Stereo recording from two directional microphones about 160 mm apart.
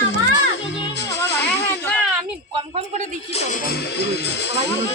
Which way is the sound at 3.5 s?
75° left (ahead or behind).